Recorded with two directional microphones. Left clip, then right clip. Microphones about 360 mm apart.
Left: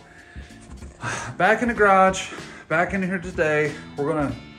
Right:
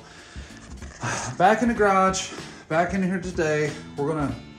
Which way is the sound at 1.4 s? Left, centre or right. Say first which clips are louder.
Left 1 dB; centre.